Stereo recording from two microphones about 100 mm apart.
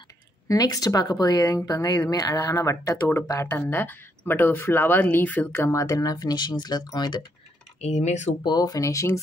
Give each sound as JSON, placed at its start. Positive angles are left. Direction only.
{"t": 0.5, "sound": "a woman's voice", "side_deg": 35}
{"t": 3.4, "sound": "speech", "side_deg": 20}
{"t": 7.8, "sound": "speech", "side_deg": 90}
{"t": 8.5, "sound": "a woman's voice", "side_deg": 40}